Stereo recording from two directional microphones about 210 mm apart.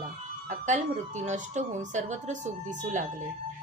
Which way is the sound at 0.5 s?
35° right (ahead or behind).